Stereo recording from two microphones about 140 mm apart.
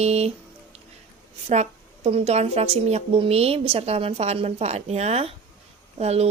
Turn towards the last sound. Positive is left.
turn(degrees=-50)  # may be behind; listen again after turning